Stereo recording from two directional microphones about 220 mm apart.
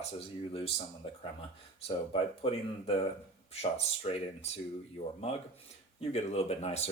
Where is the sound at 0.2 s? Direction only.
25° left (ahead or behind).